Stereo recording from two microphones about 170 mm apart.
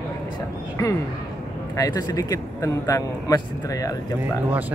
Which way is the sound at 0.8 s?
20° left (ahead or behind).